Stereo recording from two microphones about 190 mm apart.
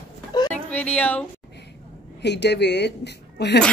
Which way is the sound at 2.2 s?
65° left (ahead or behind).